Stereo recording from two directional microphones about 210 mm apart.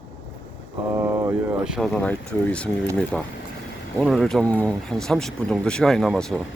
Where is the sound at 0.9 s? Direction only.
15° right (ahead or behind).